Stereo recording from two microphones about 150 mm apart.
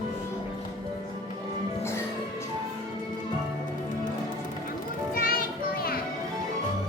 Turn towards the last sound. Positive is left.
turn(degrees=80)